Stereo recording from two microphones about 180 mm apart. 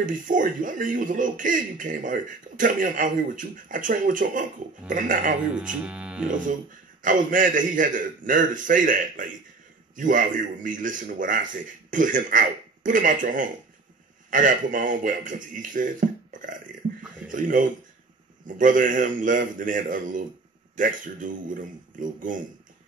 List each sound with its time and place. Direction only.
0.0 s speech: 45° right (ahead or behind)
5.9 s speech: 5° right (ahead or behind)
7.0 s speech: 50° right (ahead or behind)